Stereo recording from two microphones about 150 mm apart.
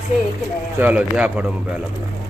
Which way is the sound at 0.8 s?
10° right (ahead or behind).